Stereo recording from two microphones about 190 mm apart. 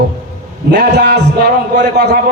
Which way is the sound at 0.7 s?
60° right (ahead or behind).